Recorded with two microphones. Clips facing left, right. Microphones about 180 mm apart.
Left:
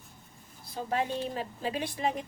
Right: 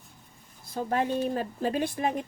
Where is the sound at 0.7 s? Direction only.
50° right (ahead or behind).